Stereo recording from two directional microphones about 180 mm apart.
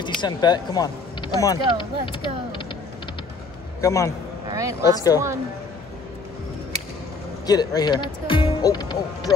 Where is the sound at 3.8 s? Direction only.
15° left (ahead or behind).